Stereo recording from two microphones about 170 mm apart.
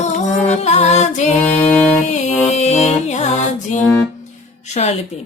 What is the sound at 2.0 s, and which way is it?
Music, 40° left (ahead or behind).